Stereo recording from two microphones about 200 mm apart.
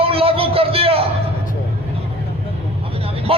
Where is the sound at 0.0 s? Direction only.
30° right (ahead or behind).